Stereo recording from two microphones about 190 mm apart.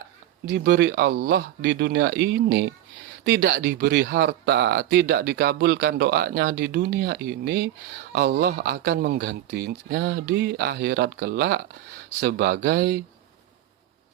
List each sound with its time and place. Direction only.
0.4 s speech: 60° right (ahead or behind)